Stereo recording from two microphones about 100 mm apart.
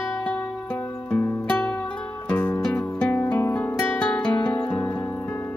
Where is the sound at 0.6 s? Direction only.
20° left (ahead or behind).